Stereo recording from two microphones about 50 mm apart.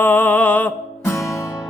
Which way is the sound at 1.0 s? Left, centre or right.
Left.